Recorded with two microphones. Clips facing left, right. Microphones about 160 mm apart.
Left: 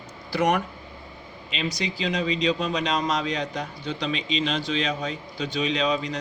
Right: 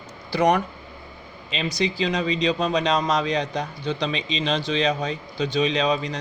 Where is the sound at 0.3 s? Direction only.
35° right (ahead or behind).